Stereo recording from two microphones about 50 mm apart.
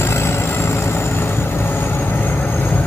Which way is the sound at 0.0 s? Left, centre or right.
Left.